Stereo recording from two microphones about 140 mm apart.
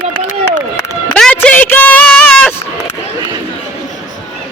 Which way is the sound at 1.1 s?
10° left (ahead or behind).